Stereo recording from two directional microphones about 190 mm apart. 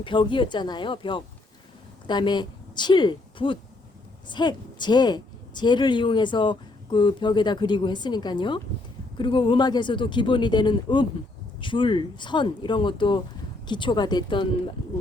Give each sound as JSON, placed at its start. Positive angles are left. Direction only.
{"t": 0.0, "sound": "a woman's voice", "side_deg": 25}